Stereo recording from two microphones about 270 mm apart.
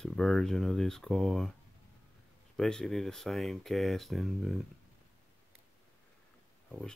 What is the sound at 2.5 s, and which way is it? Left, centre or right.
Speech, centre.